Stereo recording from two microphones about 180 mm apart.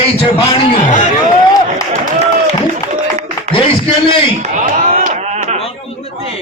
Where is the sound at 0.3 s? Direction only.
30° left (ahead or behind).